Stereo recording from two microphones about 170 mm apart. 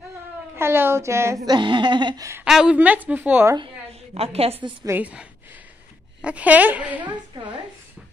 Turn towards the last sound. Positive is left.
turn(degrees=-25)  # may be behind; listen again after turning